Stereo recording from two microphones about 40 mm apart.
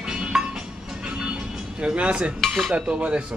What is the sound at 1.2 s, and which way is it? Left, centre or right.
Music, right.